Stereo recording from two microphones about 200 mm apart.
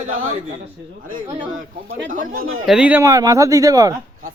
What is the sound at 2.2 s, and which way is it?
Speech, 45° right (ahead or behind).